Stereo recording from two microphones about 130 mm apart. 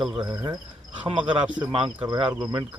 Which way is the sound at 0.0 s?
35° right (ahead or behind).